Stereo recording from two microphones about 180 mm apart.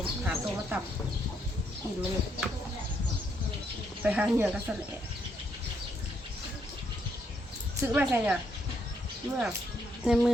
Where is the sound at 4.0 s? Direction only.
10° right (ahead or behind).